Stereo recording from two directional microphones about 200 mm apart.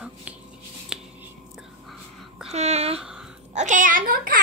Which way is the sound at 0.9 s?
5° right (ahead or behind).